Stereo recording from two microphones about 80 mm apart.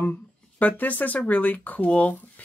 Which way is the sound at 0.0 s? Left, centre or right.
Left.